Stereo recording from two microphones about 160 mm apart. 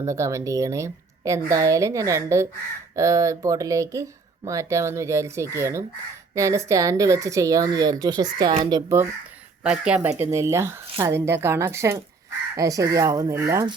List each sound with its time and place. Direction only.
0.0 s speech: 20° right (ahead or behind)
9.6 s speech: 5° right (ahead or behind)
10.1 s speech: 20° right (ahead or behind)